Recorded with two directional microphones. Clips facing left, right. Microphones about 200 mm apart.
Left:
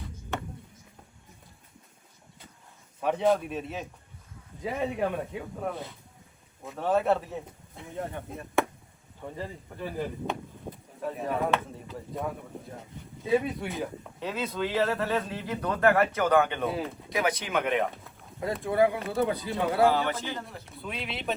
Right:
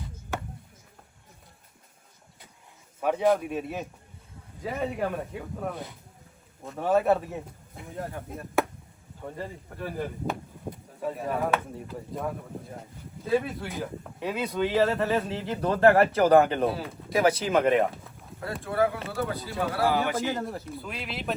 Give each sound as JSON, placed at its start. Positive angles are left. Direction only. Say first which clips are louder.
{"t": 3.0, "sound": "speech", "louder": "right 1 dB", "side_deg": -5}
{"t": 13.2, "sound": "speech", "louder": "even", "side_deg": 0}
{"t": 14.2, "sound": "speech", "louder": "right 2 dB", "side_deg": -15}
{"t": 14.4, "sound": "speech", "louder": "right 4 dB", "side_deg": 0}
{"t": 15.0, "sound": "a man's voice", "louder": "right 3 dB", "side_deg": -25}
{"t": 16.6, "sound": "speech", "louder": "right 2 dB", "side_deg": 0}
{"t": 17.1, "sound": "a man's voice", "louder": "right 7 dB", "side_deg": -30}
{"t": 18.6, "sound": "speech", "louder": "left 2 dB", "side_deg": 15}
{"t": 19.9, "sound": "a man's voice", "louder": "right 1 dB", "side_deg": -15}
{"t": 20.1, "sound": "speech", "louder": "right 7 dB", "side_deg": -45}
{"t": 20.7, "sound": "speech", "louder": "right 1 dB", "side_deg": 0}